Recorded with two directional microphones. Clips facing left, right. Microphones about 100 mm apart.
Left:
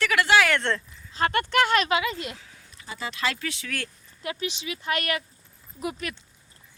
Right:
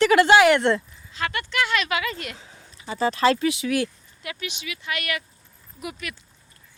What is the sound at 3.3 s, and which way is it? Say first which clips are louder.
Speech: right 11 dB; 15° right (ahead or behind).